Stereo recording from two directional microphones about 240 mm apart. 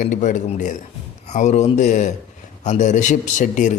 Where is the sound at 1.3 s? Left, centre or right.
Left.